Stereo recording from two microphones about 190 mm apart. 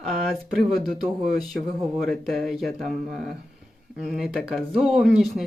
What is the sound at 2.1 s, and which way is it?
Speech, centre (ahead or behind).